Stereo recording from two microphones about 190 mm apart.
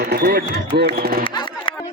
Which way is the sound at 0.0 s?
60° right (ahead or behind).